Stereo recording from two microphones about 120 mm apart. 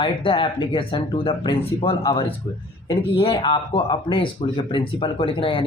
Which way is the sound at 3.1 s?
45° left (ahead or behind).